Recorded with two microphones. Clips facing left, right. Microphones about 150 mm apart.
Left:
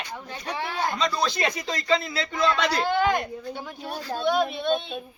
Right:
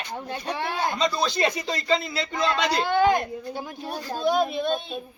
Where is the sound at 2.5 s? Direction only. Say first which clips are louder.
Even; 25° right (ahead or behind).